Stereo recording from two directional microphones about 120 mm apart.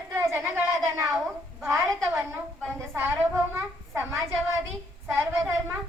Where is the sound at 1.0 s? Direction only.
Centre (ahead or behind).